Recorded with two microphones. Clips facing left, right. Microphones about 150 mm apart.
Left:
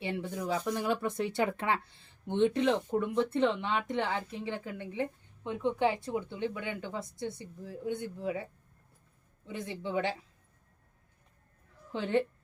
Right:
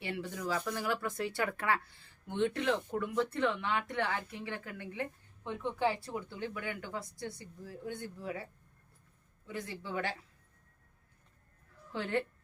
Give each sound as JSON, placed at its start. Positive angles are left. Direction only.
{"t": 0.0, "sound": "speech", "side_deg": 20}
{"t": 9.5, "sound": "speech", "side_deg": 20}
{"t": 11.9, "sound": "a woman's voice", "side_deg": 20}